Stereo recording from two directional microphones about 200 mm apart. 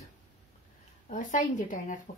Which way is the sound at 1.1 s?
40° left (ahead or behind).